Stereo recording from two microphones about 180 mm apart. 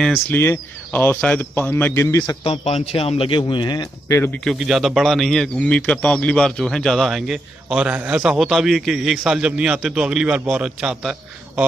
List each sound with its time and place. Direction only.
0.3 s speech: 10° left (ahead or behind)
2.4 s speech: 35° left (ahead or behind); by 4.4 s 15° left (ahead or behind)
4.5 s speech: centre (ahead or behind)